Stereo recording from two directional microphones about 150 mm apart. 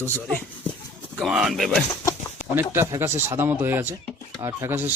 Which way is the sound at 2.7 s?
15° right (ahead or behind).